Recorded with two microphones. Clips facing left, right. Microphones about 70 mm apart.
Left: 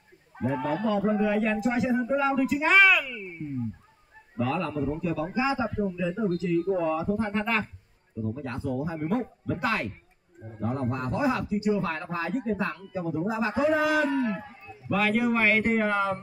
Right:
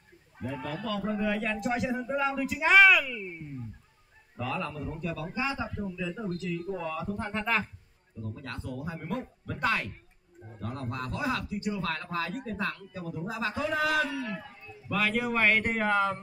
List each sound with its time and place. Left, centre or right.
0.4 s speech: left
0.8 s speech: left
1.2 s speech: centre
7.2 s speech: centre
8.2 s speech: centre
10.4 s speech: centre
14.0 s a man's voice: left
15.0 s speech: centre